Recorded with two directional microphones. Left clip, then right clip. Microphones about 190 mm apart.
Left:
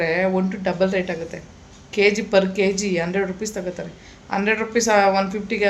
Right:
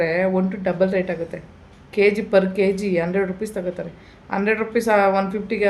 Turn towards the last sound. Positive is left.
turn(degrees=-10)  # may be behind; listen again after turning